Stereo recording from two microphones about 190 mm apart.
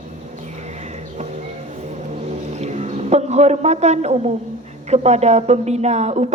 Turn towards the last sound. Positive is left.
turn(degrees=-35)  # may be behind; listen again after turning